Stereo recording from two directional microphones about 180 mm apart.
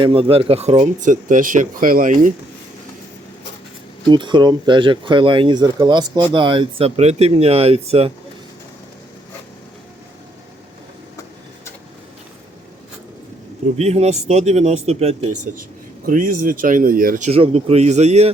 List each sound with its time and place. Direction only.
0.0 s speech: 30° right (ahead or behind); by 2.3 s 45° right (ahead or behind)
4.1 s speech: 25° right (ahead or behind)
13.7 s speech: 35° right (ahead or behind)
16.0 s speech: 50° right (ahead or behind)